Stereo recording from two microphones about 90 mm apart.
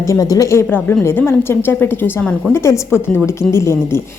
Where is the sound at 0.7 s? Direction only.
20° left (ahead or behind).